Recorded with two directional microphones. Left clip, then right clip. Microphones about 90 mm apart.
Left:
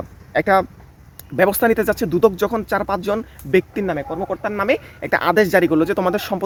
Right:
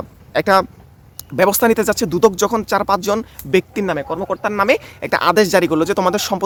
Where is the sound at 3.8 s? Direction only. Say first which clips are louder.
Right 3 dB; 45° right (ahead or behind).